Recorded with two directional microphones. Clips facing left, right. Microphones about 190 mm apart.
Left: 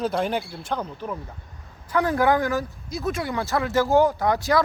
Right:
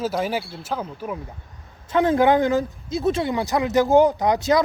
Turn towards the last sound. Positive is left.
turn(degrees=-20)  # may be behind; listen again after turning